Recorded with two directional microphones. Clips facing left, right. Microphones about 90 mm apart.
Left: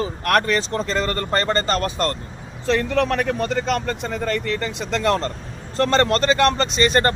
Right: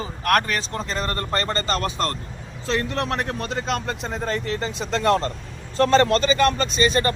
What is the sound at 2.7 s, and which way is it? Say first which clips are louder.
Speech: left 5 dB; 80° left.